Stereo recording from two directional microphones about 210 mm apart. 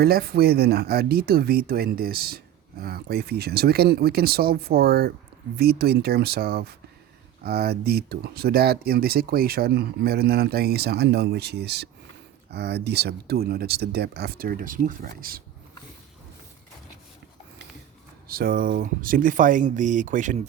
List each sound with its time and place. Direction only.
0.0 s speech: 45° right (ahead or behind)
18.3 s speech: 45° right (ahead or behind)